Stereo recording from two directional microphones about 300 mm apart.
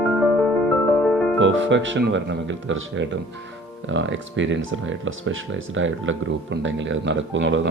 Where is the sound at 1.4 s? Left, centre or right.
Right.